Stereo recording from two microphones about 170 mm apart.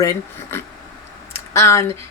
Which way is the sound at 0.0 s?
20° left (ahead or behind).